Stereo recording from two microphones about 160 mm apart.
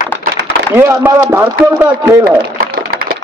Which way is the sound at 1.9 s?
25° right (ahead or behind).